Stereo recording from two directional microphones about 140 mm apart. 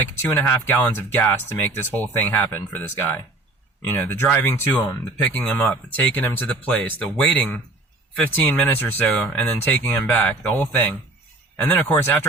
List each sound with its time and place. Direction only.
0.2 s speech: 15° left (ahead or behind)